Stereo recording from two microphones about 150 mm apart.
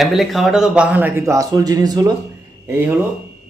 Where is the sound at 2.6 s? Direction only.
15° right (ahead or behind).